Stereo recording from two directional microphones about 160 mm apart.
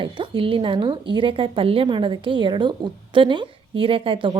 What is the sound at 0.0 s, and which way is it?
A woman's voice, 35° right (ahead or behind).